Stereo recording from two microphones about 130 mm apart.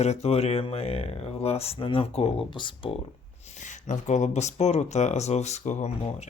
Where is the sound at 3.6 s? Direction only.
65° left (ahead or behind).